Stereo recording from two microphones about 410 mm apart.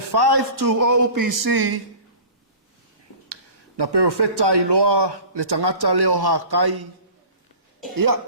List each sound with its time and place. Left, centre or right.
0.1 s a man's voice: right
3.8 s a man's voice: right
7.9 s a man's voice: right